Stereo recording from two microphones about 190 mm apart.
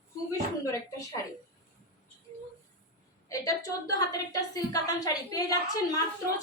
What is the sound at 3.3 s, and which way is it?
A woman's voice, 20° left (ahead or behind).